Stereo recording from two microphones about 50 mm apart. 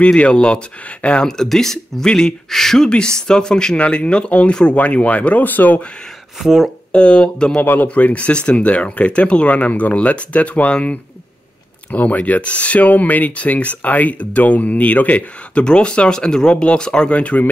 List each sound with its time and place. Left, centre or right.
0.0 s speech: left
1.2 s speech: centre; by 5.8 s left
6.3 s speech: centre
6.9 s speech: left
7.6 s speech: left
7.9 s speech: left